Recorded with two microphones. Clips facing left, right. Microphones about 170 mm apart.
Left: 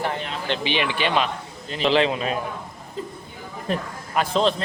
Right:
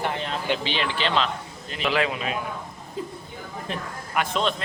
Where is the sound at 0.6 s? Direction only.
15° left (ahead or behind).